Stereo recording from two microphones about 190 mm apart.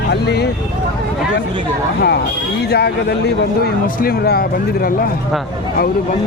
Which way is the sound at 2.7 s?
60° left (ahead or behind).